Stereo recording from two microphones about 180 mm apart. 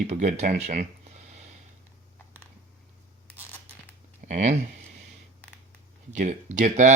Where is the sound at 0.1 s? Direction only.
40° right (ahead or behind).